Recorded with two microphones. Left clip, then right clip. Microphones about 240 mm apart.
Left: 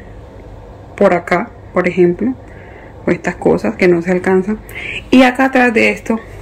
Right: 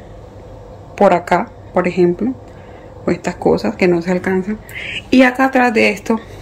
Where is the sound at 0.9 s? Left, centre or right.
Centre.